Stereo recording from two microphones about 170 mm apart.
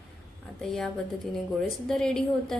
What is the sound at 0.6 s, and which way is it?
A woman's voice, centre (ahead or behind).